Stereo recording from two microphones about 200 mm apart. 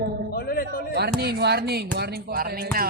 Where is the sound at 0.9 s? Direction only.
55° right (ahead or behind).